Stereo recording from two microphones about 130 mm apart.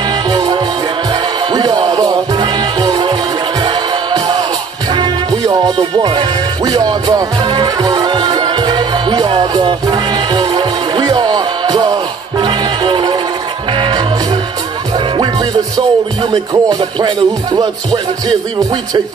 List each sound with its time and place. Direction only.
0.1 s music: 35° right (ahead or behind)